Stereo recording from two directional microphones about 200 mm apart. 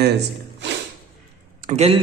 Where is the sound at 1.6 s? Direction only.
30° right (ahead or behind).